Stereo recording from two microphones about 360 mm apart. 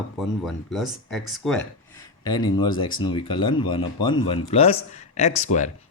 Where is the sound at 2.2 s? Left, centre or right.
Centre.